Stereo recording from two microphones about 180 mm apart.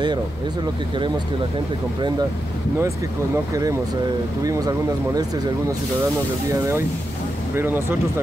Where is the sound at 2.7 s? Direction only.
15° right (ahead or behind).